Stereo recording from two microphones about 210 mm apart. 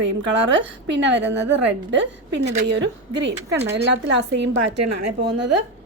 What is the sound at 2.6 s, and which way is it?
A woman's voice, 60° right (ahead or behind).